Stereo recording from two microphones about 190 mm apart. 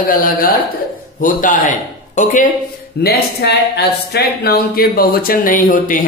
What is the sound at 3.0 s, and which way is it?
Speech, 55° left (ahead or behind).